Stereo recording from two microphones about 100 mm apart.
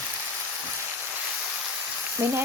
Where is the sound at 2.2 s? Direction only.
20° right (ahead or behind).